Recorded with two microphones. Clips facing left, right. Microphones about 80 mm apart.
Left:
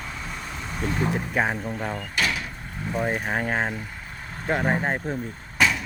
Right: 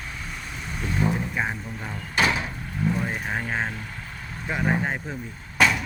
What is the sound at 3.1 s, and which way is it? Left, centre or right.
Speech, left.